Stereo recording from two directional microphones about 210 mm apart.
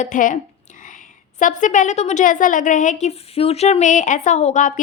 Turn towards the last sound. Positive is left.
turn(degrees=35)  # may be behind; listen again after turning